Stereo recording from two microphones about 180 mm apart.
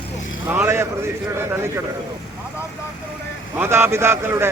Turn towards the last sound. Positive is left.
turn(degrees=-15)  # may be behind; listen again after turning